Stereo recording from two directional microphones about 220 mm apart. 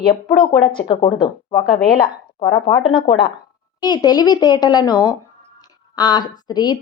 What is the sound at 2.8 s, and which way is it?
Speech, 25° left (ahead or behind).